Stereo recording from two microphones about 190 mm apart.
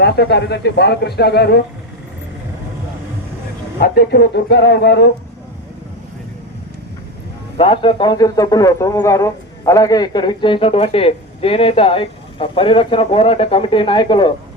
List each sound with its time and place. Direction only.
0.0 s speech: 60° left (ahead or behind)
3.8 s speech: 55° left (ahead or behind)
7.5 s a man's voice: 30° left (ahead or behind)